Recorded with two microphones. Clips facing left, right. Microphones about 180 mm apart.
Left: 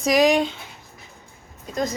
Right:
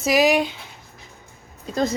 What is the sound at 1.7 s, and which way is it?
Speech, 30° right (ahead or behind).